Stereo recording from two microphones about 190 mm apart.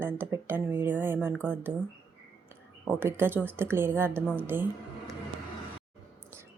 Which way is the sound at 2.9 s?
10° right (ahead or behind).